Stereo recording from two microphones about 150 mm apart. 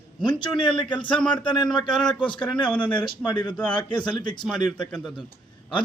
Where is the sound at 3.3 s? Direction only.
30° left (ahead or behind).